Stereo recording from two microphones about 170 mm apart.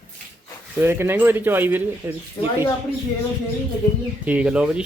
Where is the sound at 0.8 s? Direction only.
15° right (ahead or behind).